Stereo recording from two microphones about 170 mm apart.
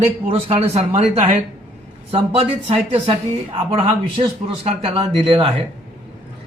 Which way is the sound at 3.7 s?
35° right (ahead or behind).